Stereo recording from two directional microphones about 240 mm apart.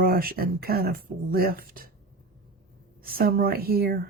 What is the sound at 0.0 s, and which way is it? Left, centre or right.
Speech, right.